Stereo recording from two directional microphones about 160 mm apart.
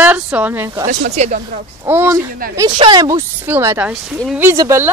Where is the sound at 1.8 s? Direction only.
20° right (ahead or behind).